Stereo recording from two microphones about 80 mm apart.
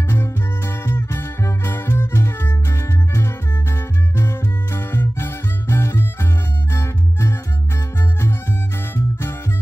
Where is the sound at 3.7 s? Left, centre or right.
Left.